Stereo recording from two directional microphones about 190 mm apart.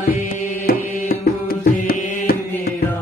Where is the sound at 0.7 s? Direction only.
50° left (ahead or behind).